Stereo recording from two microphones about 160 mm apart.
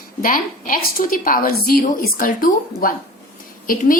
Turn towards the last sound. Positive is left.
turn(degrees=60)  # may be behind; listen again after turning